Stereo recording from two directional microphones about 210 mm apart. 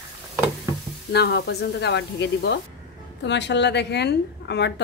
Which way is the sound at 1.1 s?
50° left (ahead or behind).